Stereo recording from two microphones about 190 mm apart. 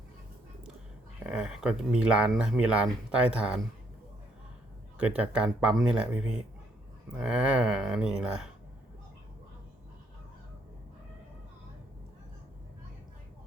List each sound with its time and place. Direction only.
1.3 s speech: 5° right (ahead or behind)
4.9 s speech: 5° right (ahead or behind)